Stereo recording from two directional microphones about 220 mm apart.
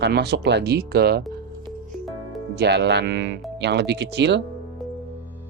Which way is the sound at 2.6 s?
50° right (ahead or behind).